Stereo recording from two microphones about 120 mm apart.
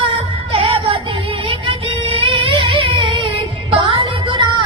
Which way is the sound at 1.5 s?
50° right (ahead or behind).